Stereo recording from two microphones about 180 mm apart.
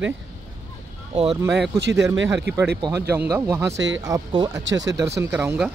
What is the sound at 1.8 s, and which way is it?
Speech, 75° right (ahead or behind).